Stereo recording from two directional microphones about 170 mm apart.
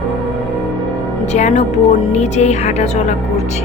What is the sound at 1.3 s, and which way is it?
A woman's voice, 45° left (ahead or behind).